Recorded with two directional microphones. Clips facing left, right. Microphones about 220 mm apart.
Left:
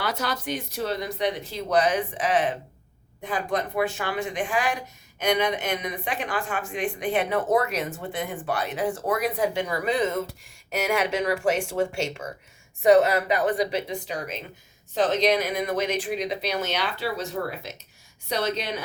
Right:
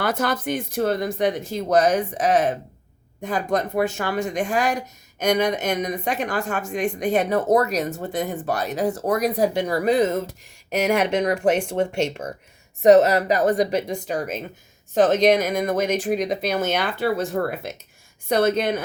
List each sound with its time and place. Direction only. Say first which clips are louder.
0.0 s a woman's voice: right 6 dB; 50° right (ahead or behind)
12.8 s speech: right 4 dB; 40° right (ahead or behind)